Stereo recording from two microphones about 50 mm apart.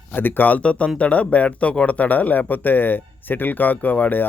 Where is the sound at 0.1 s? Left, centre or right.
Left.